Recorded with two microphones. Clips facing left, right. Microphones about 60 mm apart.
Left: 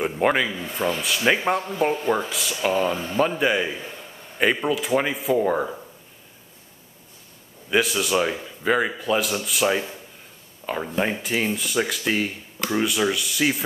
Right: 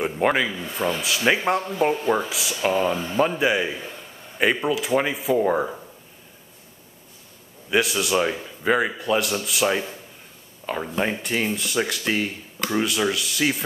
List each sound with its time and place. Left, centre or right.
0.0 s speech: centre
7.7 s speech: centre